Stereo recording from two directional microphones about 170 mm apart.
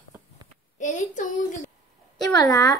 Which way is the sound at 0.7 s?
45° left (ahead or behind).